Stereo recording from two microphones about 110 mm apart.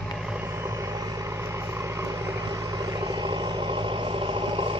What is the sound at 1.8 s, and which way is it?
Vehicle, 25° right (ahead or behind).